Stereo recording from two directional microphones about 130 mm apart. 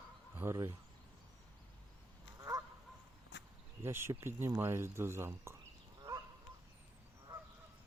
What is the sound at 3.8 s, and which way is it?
Speech, 20° right (ahead or behind).